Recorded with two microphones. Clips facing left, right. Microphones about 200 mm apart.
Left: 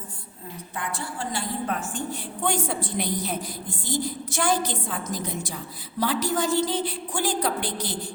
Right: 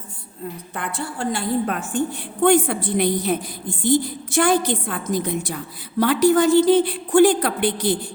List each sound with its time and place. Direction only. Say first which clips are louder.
0.8 s a woman's voice: right 5 dB; 60° right (ahead or behind)